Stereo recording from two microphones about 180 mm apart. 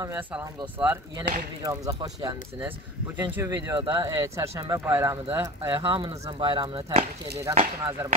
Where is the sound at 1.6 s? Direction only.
20° right (ahead or behind).